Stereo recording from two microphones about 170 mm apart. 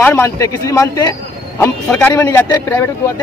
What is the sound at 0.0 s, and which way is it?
A man's voice, 15° left (ahead or behind).